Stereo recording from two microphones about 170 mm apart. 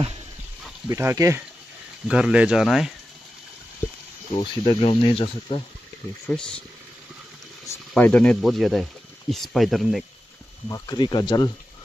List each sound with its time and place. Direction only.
0.8 s speech: 15° right (ahead or behind)
2.0 s speech: 5° right (ahead or behind)
4.4 s speech: 30° left (ahead or behind)
6.2 s speech: 5° left (ahead or behind)
7.9 s speech: 5° left (ahead or behind)
10.7 s speech: 25° left (ahead or behind)